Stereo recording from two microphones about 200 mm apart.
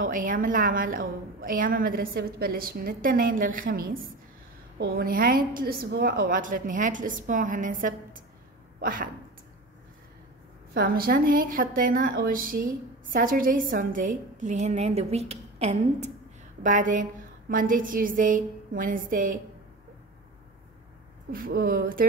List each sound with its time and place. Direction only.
0.0 s a woman's voice: 40° right (ahead or behind)
10.7 s a woman's voice: 50° right (ahead or behind)
21.3 s a woman's voice: 45° right (ahead or behind)